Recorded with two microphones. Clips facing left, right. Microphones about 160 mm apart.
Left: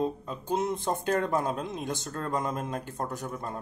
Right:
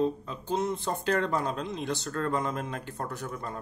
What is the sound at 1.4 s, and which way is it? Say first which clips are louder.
Speech: even; 50° left (ahead or behind).